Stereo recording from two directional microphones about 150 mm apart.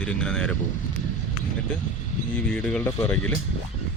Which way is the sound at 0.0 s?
5° left (ahead or behind).